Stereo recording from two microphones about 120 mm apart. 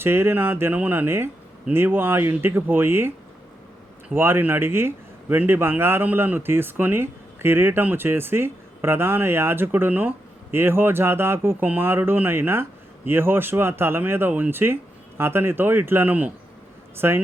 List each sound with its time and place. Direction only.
0.0 s speech: 20° right (ahead or behind)
4.1 s speech: 20° right (ahead or behind)